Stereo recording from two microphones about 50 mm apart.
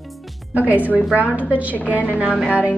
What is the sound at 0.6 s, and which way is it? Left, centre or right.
A woman's voice, right.